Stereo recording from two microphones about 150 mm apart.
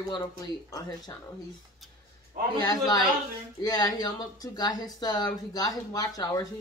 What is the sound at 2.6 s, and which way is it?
Speech, 25° left (ahead or behind).